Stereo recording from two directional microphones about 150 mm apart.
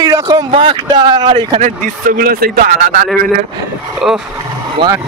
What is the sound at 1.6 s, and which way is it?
Speech, 55° right (ahead or behind).